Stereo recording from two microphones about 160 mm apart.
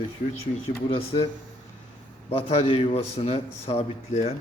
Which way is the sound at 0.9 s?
35° left (ahead or behind).